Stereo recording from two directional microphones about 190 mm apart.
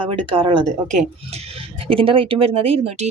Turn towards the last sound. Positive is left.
turn(degrees=-30)  # may be behind; listen again after turning